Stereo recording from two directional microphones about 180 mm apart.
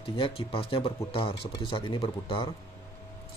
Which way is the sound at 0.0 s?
30° left (ahead or behind).